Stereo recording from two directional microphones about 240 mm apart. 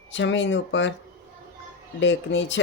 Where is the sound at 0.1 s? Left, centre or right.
Left.